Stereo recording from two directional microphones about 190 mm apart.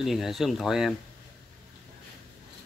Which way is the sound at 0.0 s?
Centre (ahead or behind).